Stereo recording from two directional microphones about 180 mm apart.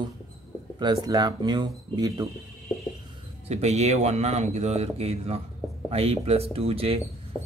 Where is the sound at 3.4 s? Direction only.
35° right (ahead or behind).